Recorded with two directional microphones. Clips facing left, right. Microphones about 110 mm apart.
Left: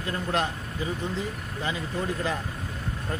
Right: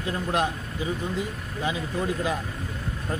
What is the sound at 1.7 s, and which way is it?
Speech, 15° right (ahead or behind).